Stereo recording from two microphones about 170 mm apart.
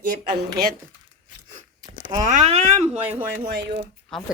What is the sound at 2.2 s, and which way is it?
Speech, 45° right (ahead or behind).